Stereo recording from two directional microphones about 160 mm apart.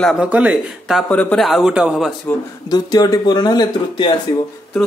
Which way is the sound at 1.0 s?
10° left (ahead or behind).